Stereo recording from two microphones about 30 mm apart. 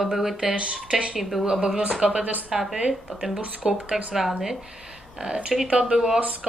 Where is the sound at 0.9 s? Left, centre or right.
Right.